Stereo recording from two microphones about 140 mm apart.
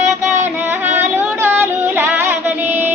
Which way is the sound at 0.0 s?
60° right (ahead or behind).